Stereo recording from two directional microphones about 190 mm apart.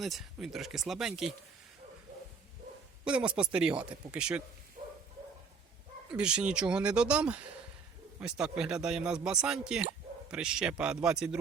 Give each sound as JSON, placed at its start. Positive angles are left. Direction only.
{"t": 0.0, "sound": "speech", "side_deg": 0}
{"t": 3.0, "sound": "speech", "side_deg": -5}
{"t": 4.8, "sound": "bow-wow", "side_deg": -35}
{"t": 6.1, "sound": "speech", "side_deg": -5}